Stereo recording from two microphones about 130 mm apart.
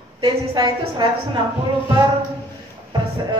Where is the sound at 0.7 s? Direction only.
35° right (ahead or behind).